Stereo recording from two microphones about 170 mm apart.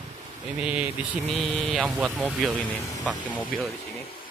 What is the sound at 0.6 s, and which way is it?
Vehicle, 10° right (ahead or behind).